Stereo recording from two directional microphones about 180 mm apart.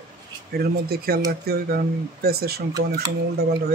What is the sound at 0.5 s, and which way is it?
Speech, 60° right (ahead or behind).